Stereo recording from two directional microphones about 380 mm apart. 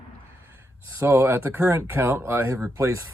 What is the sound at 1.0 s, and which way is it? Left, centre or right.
Speech, centre.